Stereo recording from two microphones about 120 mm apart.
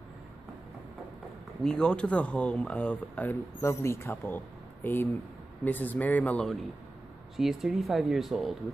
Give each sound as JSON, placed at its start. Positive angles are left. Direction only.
{"t": 1.6, "sound": "speech", "side_deg": 5}